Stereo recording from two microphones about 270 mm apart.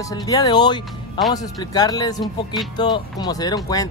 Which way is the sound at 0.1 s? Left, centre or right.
Centre.